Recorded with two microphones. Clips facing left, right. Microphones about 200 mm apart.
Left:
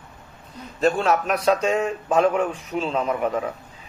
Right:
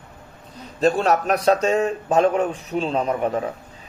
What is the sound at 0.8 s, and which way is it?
Speech, 40° right (ahead or behind).